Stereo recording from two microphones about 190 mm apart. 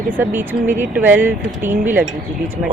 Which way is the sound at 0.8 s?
10° right (ahead or behind).